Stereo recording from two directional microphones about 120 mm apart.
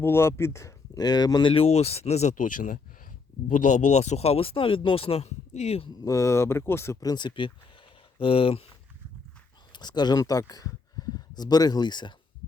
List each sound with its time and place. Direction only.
0.0 s speech: 20° left (ahead or behind); by 5.9 s 60° left (ahead or behind)
6.0 s speech: 25° left (ahead or behind); by 8.6 s 50° left (ahead or behind)
9.7 s speech: 35° left (ahead or behind)